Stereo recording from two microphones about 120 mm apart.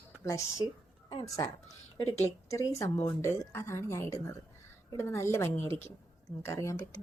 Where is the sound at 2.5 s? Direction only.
25° left (ahead or behind).